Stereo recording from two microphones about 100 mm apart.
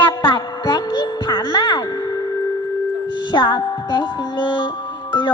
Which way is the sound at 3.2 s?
45° left (ahead or behind).